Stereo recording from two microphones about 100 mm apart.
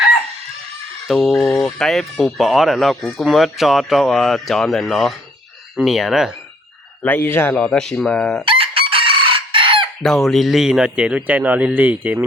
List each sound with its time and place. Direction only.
1.1 s speech: 5° left (ahead or behind)
7.0 s a man's voice: 20° left (ahead or behind)
7.6 s speech: 5° left (ahead or behind)
8.4 s chicken: 65° right (ahead or behind)
10.0 s speech: 5° left (ahead or behind); by 12.2 s 15° right (ahead or behind)